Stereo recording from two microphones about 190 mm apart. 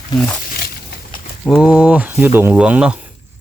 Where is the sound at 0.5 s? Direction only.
50° left (ahead or behind).